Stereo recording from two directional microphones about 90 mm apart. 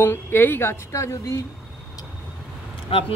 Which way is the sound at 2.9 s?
90° left.